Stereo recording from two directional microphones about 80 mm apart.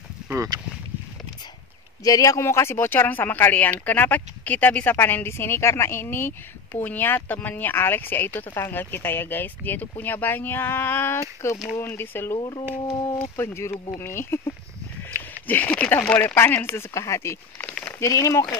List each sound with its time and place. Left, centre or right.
0.2 s a sound: centre
2.0 s speech: left
11.1 s speech: left
15.4 s speech: left
17.6 s a sound: centre
17.9 s speech: left